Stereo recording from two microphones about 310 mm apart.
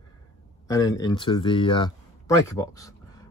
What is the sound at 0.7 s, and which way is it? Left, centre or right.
Speech, centre.